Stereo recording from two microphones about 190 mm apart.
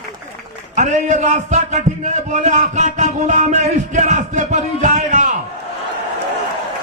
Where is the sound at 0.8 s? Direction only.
40° right (ahead or behind).